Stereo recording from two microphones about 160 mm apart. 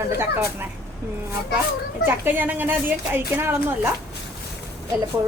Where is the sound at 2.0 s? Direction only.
15° right (ahead or behind).